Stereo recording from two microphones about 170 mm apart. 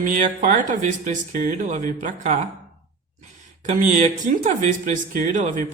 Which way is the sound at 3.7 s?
50° right (ahead or behind).